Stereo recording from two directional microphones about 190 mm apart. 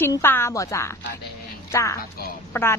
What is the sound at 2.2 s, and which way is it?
Speech, 50° left (ahead or behind).